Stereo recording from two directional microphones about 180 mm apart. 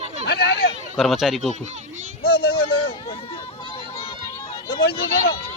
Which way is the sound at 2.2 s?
55° left (ahead or behind).